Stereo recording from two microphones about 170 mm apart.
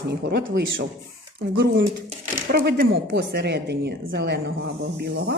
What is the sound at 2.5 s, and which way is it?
Speech, 75° right (ahead or behind).